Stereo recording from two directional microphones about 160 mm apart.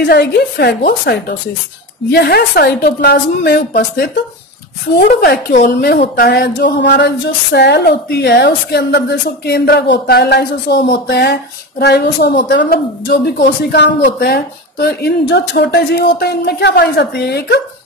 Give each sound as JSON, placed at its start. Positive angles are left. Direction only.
{"t": 0.0, "sound": "a woman's voice", "side_deg": 85}